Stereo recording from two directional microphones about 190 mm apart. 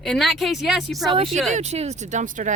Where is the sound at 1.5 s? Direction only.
35° right (ahead or behind).